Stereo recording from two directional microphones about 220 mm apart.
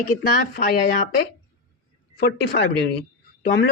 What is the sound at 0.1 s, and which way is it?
Speech, 45° left (ahead or behind).